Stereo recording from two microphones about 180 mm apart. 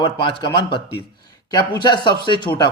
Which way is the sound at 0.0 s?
30° left (ahead or behind).